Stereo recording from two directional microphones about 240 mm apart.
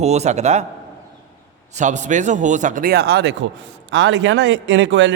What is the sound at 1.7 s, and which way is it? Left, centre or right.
A man's voice, right.